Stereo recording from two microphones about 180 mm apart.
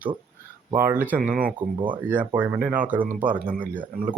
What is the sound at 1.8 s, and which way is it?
Speech, 25° right (ahead or behind).